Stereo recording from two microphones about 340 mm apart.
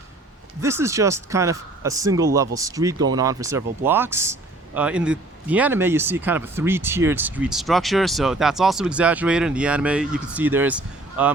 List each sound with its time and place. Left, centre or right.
0.6 s speech: centre